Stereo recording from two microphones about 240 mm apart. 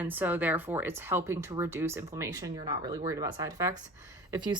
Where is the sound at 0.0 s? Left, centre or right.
Centre.